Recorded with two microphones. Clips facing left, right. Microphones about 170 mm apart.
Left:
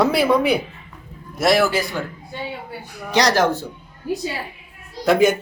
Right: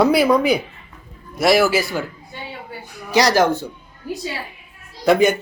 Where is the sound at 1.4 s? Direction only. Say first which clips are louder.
Right 2 dB; centre (ahead or behind).